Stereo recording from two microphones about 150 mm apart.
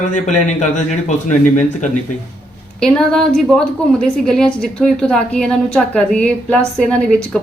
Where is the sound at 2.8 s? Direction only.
5° left (ahead or behind).